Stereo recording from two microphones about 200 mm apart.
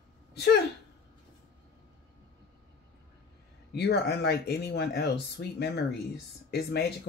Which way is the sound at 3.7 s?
55° left (ahead or behind).